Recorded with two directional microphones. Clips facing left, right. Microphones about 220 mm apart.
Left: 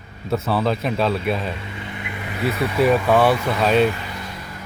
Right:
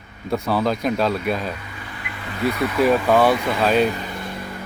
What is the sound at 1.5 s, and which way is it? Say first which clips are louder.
Speech: left 3 dB; 25° left (ahead or behind).